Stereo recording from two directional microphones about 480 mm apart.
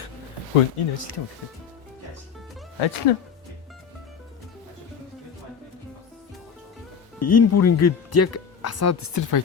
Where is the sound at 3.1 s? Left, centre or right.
Left.